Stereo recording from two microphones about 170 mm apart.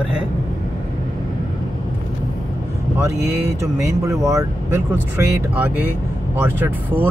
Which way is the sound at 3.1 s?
15° right (ahead or behind).